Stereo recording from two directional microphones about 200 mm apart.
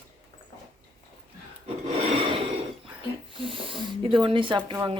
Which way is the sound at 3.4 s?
25° right (ahead or behind).